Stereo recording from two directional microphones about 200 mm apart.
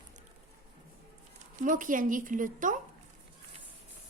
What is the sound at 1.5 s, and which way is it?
A woman's voice, 40° right (ahead or behind).